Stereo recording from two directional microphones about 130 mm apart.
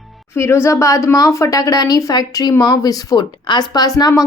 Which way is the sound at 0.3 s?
20° left (ahead or behind).